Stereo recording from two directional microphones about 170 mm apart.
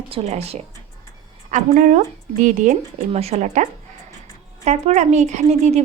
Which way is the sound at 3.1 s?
40° right (ahead or behind).